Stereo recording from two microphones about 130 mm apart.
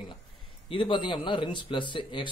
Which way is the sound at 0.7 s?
40° left (ahead or behind).